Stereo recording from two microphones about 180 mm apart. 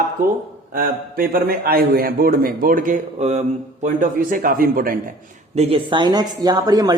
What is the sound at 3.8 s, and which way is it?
Speech, 50° right (ahead or behind).